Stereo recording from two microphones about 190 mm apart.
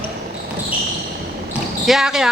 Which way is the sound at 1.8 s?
Centre (ahead or behind).